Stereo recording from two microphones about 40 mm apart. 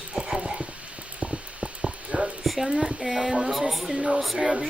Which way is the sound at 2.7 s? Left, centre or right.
Centre.